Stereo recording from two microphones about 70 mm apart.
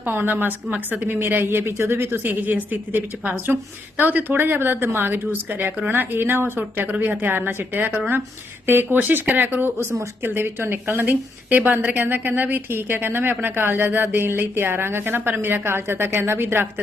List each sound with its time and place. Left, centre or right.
0.0 s a woman's voice: right